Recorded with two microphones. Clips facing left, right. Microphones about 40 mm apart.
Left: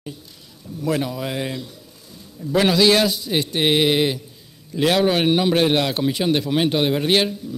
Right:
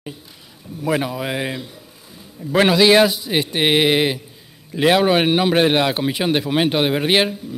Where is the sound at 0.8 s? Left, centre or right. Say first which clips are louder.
Right 2 dB; centre.